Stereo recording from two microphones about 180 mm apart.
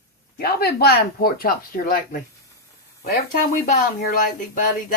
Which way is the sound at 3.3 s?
45° left (ahead or behind).